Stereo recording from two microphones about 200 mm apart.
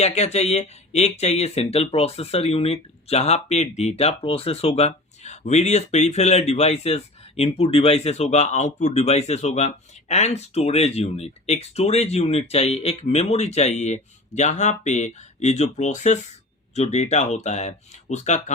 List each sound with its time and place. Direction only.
0.0 s speech: 35° left (ahead or behind)